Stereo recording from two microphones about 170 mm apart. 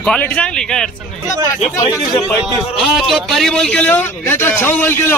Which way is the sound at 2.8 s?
Centre (ahead or behind).